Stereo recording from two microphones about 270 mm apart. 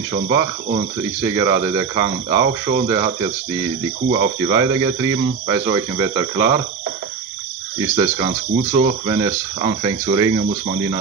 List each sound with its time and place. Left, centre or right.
0.1 s speech: centre
7.9 s speech: right